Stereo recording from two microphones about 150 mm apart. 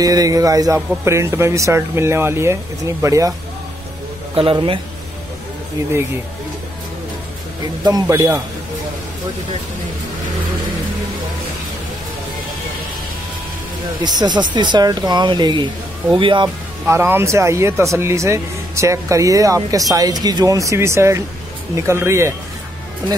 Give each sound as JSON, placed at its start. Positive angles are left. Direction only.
{"t": 0.0, "sound": "speech", "side_deg": -25}
{"t": 4.4, "sound": "speech", "side_deg": -35}
{"t": 7.8, "sound": "speech", "side_deg": -25}
{"t": 14.0, "sound": "speech", "side_deg": -30}
{"t": 16.8, "sound": "speech", "side_deg": -15}